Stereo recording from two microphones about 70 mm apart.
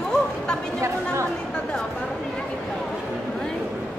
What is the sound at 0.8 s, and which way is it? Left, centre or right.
Speech, right.